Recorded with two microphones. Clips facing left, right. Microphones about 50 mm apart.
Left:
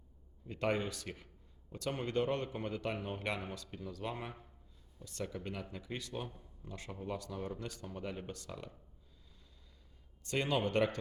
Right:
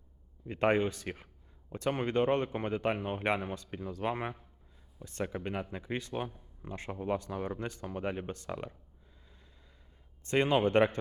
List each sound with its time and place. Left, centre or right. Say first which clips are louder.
0.4 s a man's voice: right 7 dB; right
10.2 s speech: right 7 dB; right